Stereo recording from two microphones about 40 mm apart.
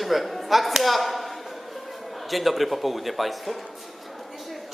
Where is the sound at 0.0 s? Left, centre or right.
Centre.